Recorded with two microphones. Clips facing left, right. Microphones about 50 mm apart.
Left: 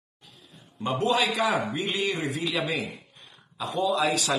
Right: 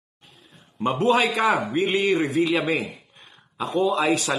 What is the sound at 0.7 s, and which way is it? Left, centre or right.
A man's voice, right.